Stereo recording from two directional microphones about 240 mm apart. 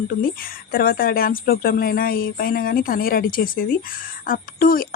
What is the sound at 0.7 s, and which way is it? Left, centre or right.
Speech, left.